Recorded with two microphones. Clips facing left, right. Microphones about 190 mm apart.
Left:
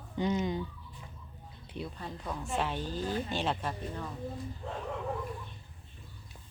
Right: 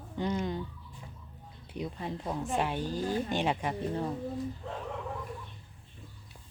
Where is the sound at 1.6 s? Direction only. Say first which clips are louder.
Right 4 dB; 15° right (ahead or behind).